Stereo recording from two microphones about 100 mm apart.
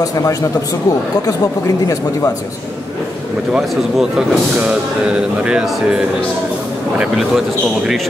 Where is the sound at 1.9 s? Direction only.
35° left (ahead or behind).